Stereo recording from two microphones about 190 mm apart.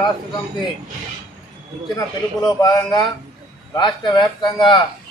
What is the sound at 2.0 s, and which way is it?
A man's voice, 20° left (ahead or behind).